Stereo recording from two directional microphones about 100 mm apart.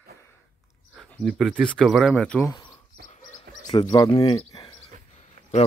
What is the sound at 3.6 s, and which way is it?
Speech, 40° left (ahead or behind).